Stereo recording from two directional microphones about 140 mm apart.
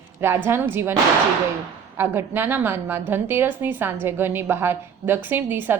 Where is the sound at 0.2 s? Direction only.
15° right (ahead or behind).